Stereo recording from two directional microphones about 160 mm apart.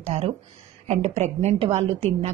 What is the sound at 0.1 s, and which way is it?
A woman's voice, 40° right (ahead or behind).